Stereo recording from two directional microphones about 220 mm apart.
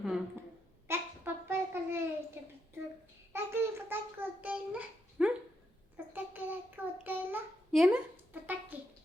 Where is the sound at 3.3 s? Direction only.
10° right (ahead or behind).